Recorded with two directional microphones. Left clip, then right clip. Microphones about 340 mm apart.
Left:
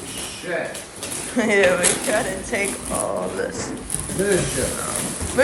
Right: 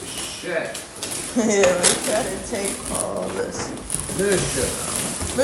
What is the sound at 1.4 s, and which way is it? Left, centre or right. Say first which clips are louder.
Speech: left 2 dB; centre.